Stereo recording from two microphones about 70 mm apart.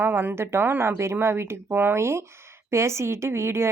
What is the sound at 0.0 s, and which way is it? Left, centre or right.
A woman's voice, right.